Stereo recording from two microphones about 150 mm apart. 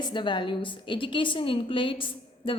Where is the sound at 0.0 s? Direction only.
30° left (ahead or behind).